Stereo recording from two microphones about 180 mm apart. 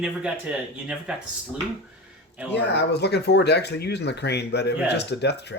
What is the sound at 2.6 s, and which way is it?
Speech, 70° left (ahead or behind).